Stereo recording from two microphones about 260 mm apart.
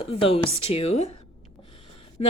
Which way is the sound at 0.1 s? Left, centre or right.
Left.